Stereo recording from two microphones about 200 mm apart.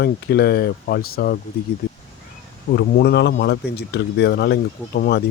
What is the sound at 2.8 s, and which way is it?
Speech, 55° left (ahead or behind).